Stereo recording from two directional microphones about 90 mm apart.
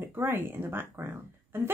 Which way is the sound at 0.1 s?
25° right (ahead or behind).